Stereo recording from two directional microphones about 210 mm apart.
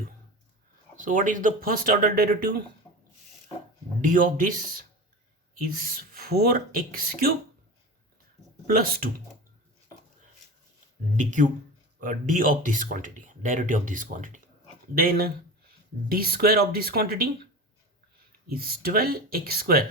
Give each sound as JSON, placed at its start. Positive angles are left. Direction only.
{"t": 0.9, "sound": "speech", "side_deg": -40}
{"t": 4.0, "sound": "speech", "side_deg": -40}
{"t": 8.6, "sound": "speech", "side_deg": -45}
{"t": 11.2, "sound": "speech", "side_deg": -35}
{"t": 18.4, "sound": "speech", "side_deg": -45}